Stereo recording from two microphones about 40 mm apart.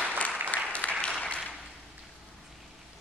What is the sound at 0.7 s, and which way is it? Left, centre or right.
Applause, left.